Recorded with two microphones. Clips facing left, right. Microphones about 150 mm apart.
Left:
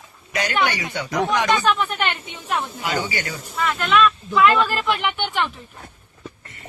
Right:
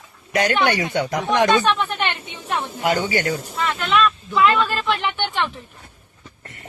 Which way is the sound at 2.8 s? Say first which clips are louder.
Right 5 dB; 50° right (ahead or behind).